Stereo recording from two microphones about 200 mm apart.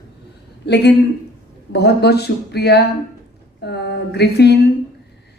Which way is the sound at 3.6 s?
55° left (ahead or behind).